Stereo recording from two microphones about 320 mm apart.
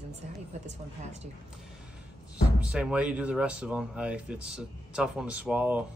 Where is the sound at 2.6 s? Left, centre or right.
Centre.